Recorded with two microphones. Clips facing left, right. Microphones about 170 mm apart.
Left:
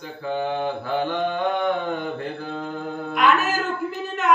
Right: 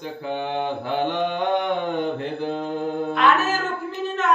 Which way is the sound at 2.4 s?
20° right (ahead or behind).